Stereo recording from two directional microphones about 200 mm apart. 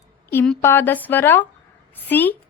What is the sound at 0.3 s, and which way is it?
A woman's voice, 5° left (ahead or behind).